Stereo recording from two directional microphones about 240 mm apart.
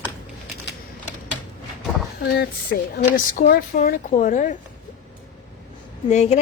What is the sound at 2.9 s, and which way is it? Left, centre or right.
Speech, left.